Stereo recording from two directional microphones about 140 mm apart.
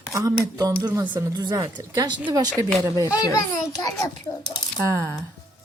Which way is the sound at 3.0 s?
25° left (ahead or behind).